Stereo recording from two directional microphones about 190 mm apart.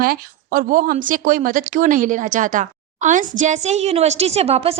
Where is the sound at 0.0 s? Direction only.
50° right (ahead or behind).